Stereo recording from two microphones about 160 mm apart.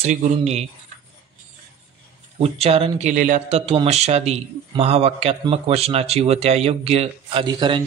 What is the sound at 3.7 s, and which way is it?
A man's voice, 40° right (ahead or behind).